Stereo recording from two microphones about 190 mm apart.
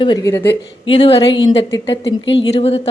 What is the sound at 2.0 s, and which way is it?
Speech, 75° left (ahead or behind).